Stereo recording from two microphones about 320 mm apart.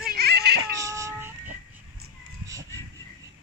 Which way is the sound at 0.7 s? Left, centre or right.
Centre.